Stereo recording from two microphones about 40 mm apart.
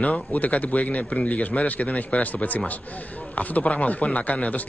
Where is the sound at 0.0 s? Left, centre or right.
Left.